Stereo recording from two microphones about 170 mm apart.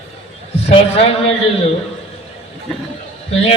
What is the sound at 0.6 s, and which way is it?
A man's voice, 35° left (ahead or behind).